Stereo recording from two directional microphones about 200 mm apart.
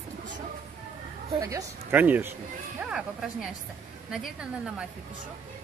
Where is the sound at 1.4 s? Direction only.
15° right (ahead or behind).